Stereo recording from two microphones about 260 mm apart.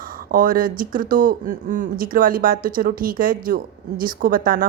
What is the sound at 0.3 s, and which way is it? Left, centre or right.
A woman's voice, right.